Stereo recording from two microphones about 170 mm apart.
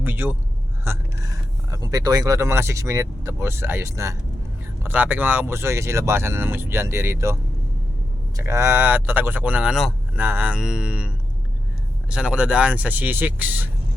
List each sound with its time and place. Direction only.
0.0 s a man's voice: 10° right (ahead or behind)
8.4 s speech: 15° right (ahead or behind)
12.1 s speech: 5° right (ahead or behind)